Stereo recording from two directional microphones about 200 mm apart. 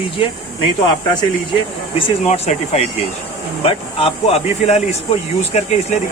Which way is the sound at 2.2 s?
35° left (ahead or behind).